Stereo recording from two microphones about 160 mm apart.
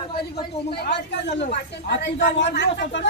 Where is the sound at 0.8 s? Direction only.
90° left.